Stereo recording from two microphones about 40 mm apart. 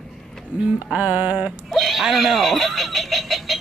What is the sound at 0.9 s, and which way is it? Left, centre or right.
Music, right.